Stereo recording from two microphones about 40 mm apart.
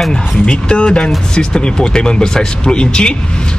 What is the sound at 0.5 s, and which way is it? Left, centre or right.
Speech, left.